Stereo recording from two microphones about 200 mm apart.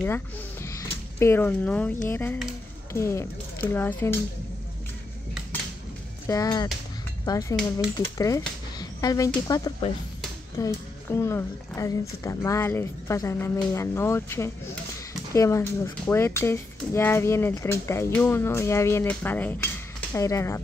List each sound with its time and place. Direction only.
0.0 s speech: 10° left (ahead or behind)
6.2 s speech: 15° left (ahead or behind)